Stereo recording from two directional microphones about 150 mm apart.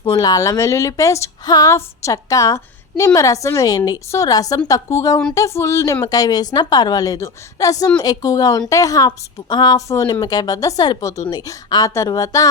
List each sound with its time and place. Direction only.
0.1 s a woman's voice: 25° left (ahead or behind)